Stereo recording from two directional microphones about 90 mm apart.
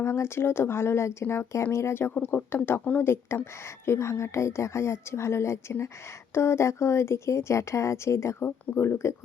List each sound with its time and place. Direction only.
0.0 s speech: 30° left (ahead or behind)
2.1 s speech: 15° left (ahead or behind)
3.1 s a woman's voice: 30° left (ahead or behind)